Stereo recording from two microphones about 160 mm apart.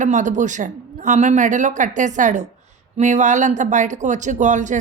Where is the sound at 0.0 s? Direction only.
50° right (ahead or behind).